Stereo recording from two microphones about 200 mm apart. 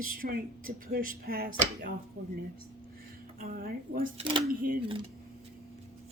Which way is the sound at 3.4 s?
45° right (ahead or behind).